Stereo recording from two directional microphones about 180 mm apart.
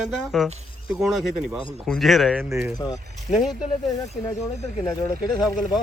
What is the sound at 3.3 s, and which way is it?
Speech, 40° left (ahead or behind).